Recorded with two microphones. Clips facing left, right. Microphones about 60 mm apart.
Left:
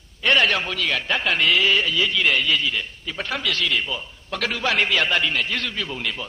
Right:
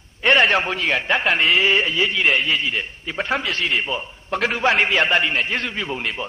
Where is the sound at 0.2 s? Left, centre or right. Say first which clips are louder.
Right 3 dB; right.